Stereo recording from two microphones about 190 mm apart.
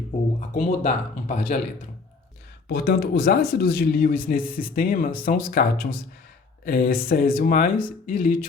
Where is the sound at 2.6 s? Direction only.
55° left (ahead or behind).